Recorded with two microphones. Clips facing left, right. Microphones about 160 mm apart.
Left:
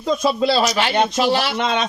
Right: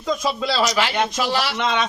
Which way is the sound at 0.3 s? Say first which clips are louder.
Left 5 dB; 30° left (ahead or behind).